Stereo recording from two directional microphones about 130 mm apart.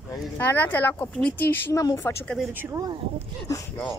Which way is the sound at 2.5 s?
15° right (ahead or behind).